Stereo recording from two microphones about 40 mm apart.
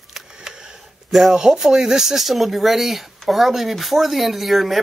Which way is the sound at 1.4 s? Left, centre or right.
Centre.